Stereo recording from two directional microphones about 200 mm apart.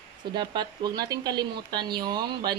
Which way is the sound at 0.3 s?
20° right (ahead or behind).